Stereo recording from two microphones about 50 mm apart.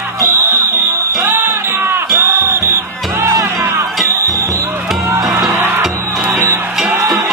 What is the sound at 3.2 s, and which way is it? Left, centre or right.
Music, right.